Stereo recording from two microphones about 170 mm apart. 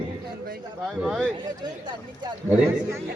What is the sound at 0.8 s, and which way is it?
Speech, 5° right (ahead or behind).